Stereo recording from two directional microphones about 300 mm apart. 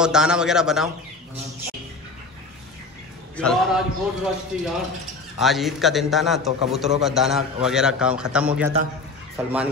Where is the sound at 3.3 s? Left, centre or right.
Centre.